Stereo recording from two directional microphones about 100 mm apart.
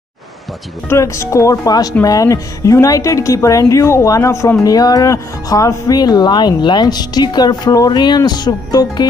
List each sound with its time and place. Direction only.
0.8 s a woman's voice: 30° left (ahead or behind); by 9.0 s 45° left (ahead or behind)